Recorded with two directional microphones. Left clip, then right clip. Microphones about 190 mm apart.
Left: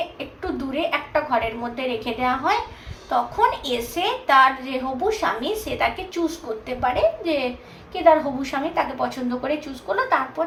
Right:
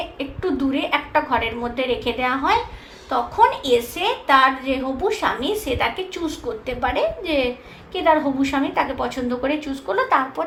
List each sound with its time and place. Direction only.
0.7 s a woman's voice: 40° right (ahead or behind)